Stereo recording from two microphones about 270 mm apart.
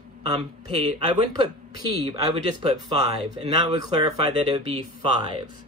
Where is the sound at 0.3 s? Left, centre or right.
Centre.